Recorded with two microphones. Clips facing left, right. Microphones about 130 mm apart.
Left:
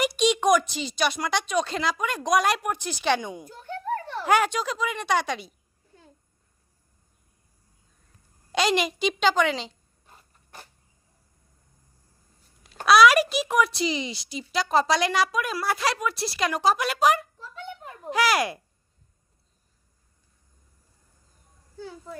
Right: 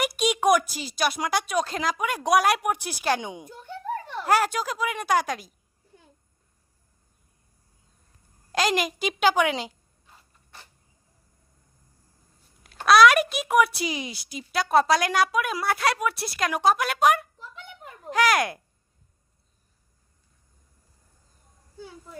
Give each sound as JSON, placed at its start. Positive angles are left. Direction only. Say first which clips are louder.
{"t": 0.0, "sound": "a woman's voice", "louder": "left 1 dB", "side_deg": -5}
{"t": 4.3, "sound": "a woman's voice", "louder": "even", "side_deg": -5}
{"t": 8.5, "sound": "a woman's voice", "louder": "left 1 dB", "side_deg": 0}
{"t": 12.8, "sound": "a sound", "louder": "even", "side_deg": 0}
{"t": 13.3, "sound": "a woman's voice", "louder": "right 2 dB", "side_deg": 0}
{"t": 17.3, "sound": "a sound", "louder": "left 1 dB", "side_deg": -20}
{"t": 18.1, "sound": "a woman's voice", "louder": "right 1 dB", "side_deg": 5}
{"t": 21.8, "sound": "speech", "louder": "left 3 dB", "side_deg": -15}